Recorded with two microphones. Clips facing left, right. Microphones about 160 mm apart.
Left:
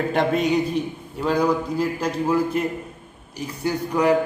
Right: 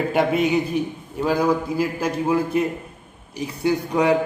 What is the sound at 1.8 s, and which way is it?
A man's voice, 10° right (ahead or behind).